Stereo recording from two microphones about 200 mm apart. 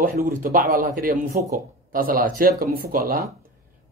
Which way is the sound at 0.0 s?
45° right (ahead or behind).